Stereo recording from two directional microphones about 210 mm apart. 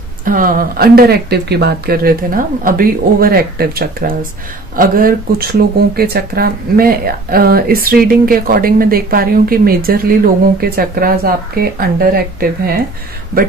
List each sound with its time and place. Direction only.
0.2 s speech: 40° right (ahead or behind)